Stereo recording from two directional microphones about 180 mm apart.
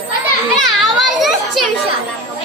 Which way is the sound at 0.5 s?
Centre (ahead or behind).